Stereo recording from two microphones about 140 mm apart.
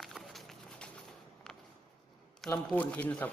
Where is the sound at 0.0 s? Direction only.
Centre (ahead or behind).